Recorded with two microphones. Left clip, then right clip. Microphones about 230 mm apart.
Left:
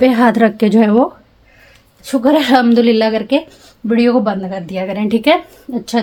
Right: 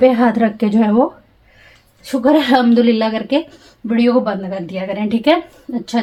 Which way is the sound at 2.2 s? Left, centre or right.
Left.